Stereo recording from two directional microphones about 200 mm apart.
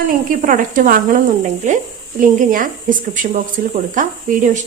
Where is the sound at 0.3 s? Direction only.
40° right (ahead or behind).